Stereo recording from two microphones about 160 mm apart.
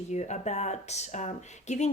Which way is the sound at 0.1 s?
45° left (ahead or behind).